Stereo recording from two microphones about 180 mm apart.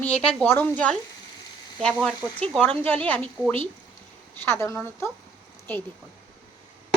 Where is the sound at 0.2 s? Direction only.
5° left (ahead or behind).